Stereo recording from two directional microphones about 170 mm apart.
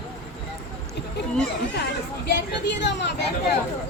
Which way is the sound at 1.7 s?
80° left.